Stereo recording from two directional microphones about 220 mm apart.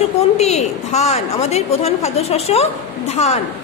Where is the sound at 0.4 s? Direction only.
30° left (ahead or behind).